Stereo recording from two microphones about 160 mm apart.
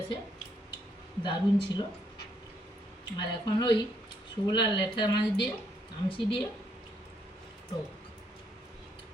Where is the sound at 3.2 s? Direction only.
25° left (ahead or behind).